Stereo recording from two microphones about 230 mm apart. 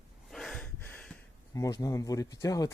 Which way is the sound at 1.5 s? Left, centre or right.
Centre.